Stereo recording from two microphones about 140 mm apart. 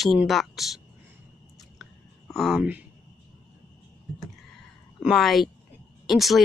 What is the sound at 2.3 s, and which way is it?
Speech, centre (ahead or behind).